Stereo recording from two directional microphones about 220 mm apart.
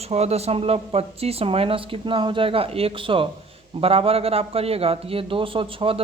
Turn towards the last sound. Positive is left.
turn(degrees=-25)  # may be behind; listen again after turning